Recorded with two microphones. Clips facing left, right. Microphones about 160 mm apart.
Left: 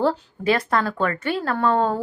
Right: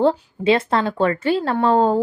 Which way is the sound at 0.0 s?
25° right (ahead or behind).